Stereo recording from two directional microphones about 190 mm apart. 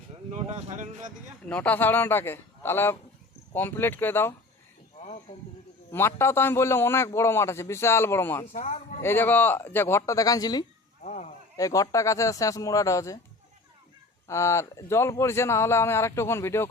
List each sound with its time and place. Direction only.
0.3 s speech: 35° right (ahead or behind)
1.5 s a man's voice: 5° left (ahead or behind)
4.9 s a sound: 35° left (ahead or behind)
5.9 s a man's voice: 10° left (ahead or behind)
8.5 s a man's voice: 35° left (ahead or behind)
9.0 s a man's voice: 10° left (ahead or behind)
11.0 s a sound: 35° left (ahead or behind)
11.5 s a man's voice: 20° left (ahead or behind)
14.3 s a man's voice: 15° left (ahead or behind)